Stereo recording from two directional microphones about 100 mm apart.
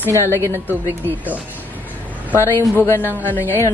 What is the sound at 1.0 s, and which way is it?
Speech, 15° right (ahead or behind).